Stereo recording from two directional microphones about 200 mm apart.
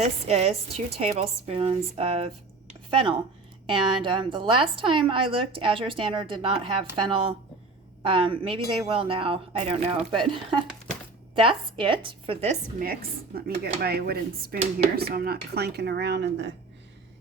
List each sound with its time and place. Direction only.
0.0 s a woman's voice: 30° right (ahead or behind)
12.8 s speech: 50° right (ahead or behind)